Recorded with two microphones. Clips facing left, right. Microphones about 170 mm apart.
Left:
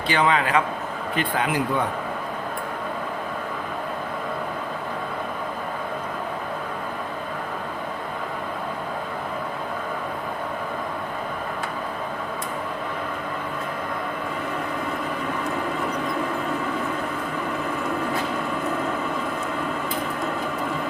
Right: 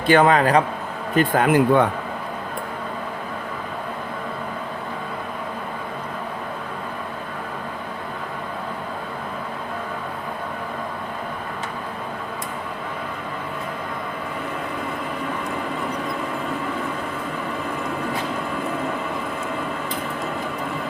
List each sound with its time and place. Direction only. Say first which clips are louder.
0.1 s speech: right 6 dB; 45° right (ahead or behind)